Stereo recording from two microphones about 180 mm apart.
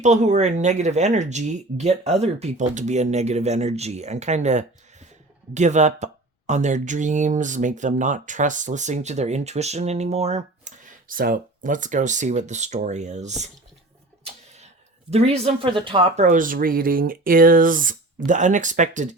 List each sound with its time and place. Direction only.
0.0 s speech: 40° right (ahead or behind)
14.3 s a sound: 40° right (ahead or behind)
15.1 s speech: 35° right (ahead or behind)